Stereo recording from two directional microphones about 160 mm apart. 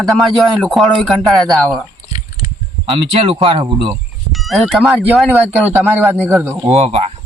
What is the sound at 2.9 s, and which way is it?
Speech, 35° right (ahead or behind).